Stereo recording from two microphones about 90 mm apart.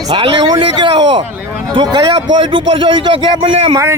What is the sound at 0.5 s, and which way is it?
Speech, 55° right (ahead or behind).